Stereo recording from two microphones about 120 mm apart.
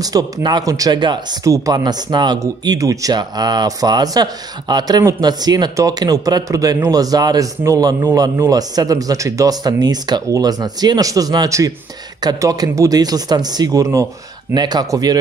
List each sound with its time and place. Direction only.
0.0 s speech: 35° right (ahead or behind)